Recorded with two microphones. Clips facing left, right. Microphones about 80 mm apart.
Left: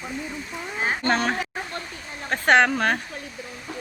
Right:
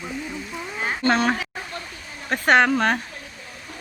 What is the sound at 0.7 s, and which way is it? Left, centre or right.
Speech, left.